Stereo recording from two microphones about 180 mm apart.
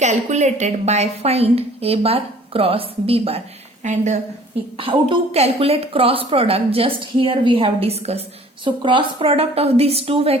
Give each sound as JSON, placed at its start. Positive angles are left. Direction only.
{"t": 0.0, "sound": "a woman's voice", "side_deg": -40}
{"t": 4.8, "sound": "a woman's voice", "side_deg": -30}